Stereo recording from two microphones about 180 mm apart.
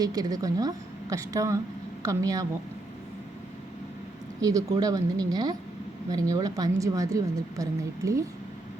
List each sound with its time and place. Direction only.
0.0 s a woman's voice: 20° right (ahead or behind)
4.4 s a woman's voice: 20° right (ahead or behind)